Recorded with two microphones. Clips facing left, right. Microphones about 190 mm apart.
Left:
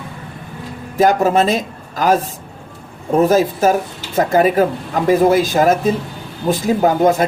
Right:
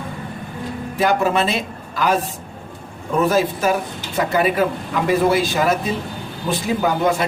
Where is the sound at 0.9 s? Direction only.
40° left (ahead or behind).